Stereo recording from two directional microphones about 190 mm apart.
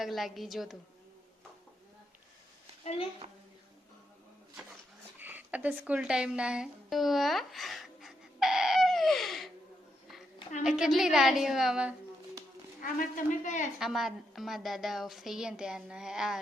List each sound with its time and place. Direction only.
0.0 s a woman's voice: centre (ahead or behind)
3.2 s a woman's voice: 35° right (ahead or behind)
5.2 s music: 10° right (ahead or behind)
10.6 s a woman's voice: 5° right (ahead or behind)
12.8 s speech: 45° left (ahead or behind)
13.7 s a woman's voice: centre (ahead or behind)